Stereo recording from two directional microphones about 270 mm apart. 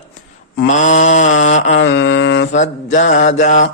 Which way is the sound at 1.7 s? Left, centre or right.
Left.